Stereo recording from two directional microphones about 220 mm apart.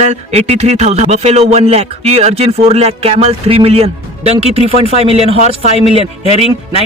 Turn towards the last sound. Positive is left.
turn(degrees=-30)  # may be behind; listen again after turning